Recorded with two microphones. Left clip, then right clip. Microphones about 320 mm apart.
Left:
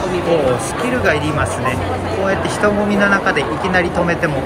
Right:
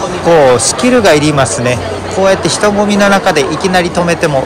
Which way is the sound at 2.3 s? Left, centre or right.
Centre.